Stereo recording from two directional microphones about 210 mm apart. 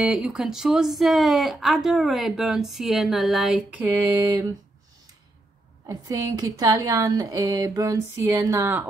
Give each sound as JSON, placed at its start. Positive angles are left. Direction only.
{"t": 0.0, "sound": "speech", "side_deg": -5}
{"t": 5.9, "sound": "a woman's voice", "side_deg": -15}